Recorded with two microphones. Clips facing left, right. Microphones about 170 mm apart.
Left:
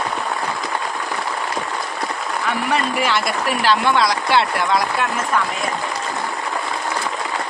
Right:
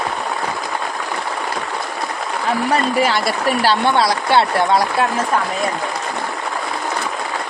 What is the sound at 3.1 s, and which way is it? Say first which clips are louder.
Speech: right 2 dB; 35° right (ahead or behind).